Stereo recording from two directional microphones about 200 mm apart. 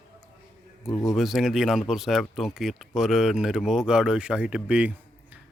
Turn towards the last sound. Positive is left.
turn(degrees=-5)  # may be behind; listen again after turning